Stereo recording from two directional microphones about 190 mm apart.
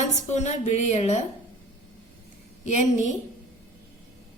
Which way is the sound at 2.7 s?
40° left (ahead or behind).